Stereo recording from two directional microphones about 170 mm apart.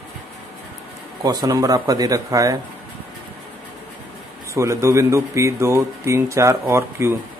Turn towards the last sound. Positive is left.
turn(degrees=-15)  # may be behind; listen again after turning